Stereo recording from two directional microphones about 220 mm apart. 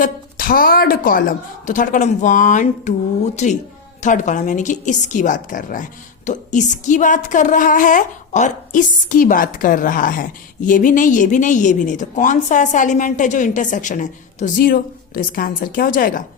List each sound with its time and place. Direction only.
0.0 s a woman's voice: 40° left (ahead or behind)